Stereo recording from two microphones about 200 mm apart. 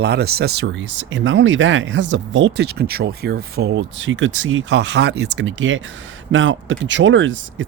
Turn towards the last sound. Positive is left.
turn(degrees=-70)  # may be behind; listen again after turning